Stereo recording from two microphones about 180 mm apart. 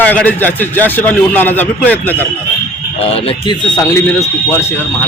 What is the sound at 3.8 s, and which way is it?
Speech, 15° left (ahead or behind).